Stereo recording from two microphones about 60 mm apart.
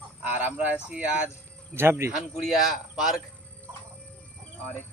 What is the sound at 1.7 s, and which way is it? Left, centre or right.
Speech, right.